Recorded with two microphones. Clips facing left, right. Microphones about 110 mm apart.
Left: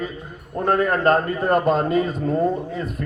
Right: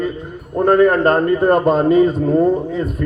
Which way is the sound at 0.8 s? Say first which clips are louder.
Right 5 dB; 40° right (ahead or behind).